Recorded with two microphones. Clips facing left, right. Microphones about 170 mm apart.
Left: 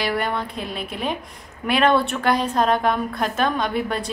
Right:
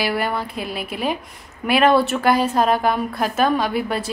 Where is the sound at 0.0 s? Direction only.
5° right (ahead or behind).